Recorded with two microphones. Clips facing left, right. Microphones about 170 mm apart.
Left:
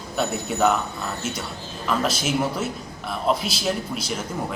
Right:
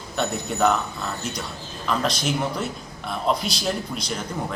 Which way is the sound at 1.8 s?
5° left (ahead or behind).